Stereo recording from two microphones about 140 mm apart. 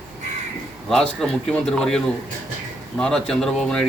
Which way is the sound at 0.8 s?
5° left (ahead or behind).